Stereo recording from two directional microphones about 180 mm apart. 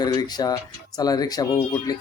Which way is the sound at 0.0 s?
20° left (ahead or behind).